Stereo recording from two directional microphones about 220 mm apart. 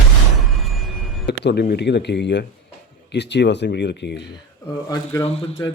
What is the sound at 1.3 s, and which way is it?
Speech, 50° left (ahead or behind).